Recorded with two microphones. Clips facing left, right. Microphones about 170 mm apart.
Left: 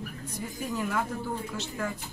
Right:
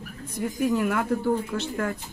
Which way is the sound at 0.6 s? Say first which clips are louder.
Right 7 dB; 65° right (ahead or behind).